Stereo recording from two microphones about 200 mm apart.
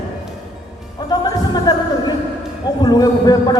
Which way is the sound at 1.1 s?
20° left (ahead or behind).